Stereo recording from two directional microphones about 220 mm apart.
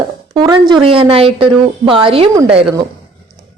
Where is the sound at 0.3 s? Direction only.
20° right (ahead or behind).